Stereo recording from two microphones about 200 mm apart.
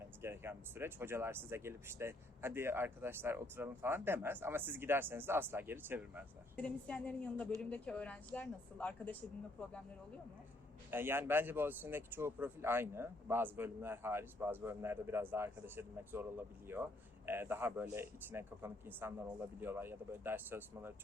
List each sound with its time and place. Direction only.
0.2 s speech: 10° right (ahead or behind)
6.6 s a woman's voice: 5° left (ahead or behind)
10.9 s speech: 10° right (ahead or behind)
17.2 s speech: 10° right (ahead or behind)